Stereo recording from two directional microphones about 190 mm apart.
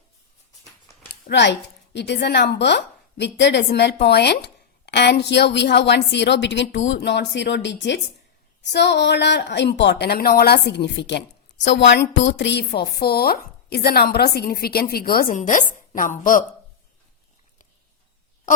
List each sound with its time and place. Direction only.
1.0 s a woman's voice: 65° left (ahead or behind); by 16.4 s 45° left (ahead or behind)